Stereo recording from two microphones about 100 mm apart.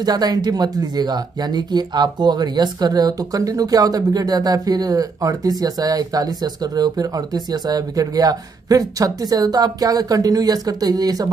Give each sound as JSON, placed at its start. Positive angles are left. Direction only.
{"t": 0.0, "sound": "speech", "side_deg": -40}